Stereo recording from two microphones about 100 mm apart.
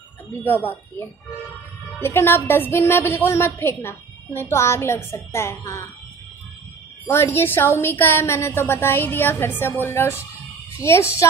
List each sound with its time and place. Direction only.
0.4 s a woman's voice: 20° left (ahead or behind)
7.1 s a woman's voice: 25° left (ahead or behind)